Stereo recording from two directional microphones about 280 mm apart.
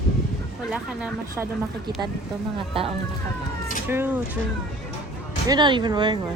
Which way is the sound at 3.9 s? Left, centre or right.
Centre.